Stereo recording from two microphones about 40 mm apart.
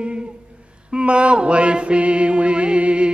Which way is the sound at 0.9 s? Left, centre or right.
Right.